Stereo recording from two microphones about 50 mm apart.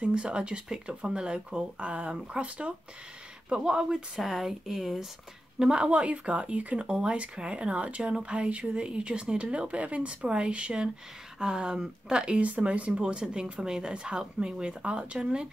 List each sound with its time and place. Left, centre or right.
0.0 s speech: right
5.6 s speech: centre
6.9 s speech: centre